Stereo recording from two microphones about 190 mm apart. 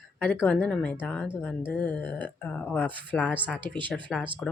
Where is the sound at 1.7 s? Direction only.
10° left (ahead or behind).